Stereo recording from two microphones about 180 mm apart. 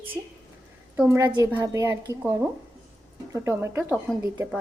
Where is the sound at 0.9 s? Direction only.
15° right (ahead or behind).